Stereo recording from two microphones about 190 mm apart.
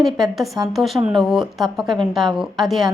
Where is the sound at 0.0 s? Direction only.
Centre (ahead or behind).